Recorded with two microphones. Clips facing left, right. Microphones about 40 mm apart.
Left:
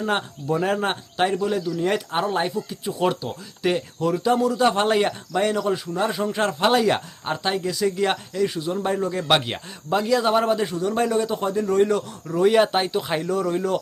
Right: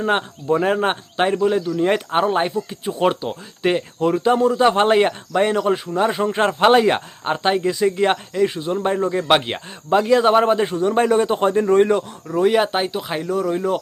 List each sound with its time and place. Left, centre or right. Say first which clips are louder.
0.0 s speech: right 4 dB; right
11.9 s speech: right 3 dB; centre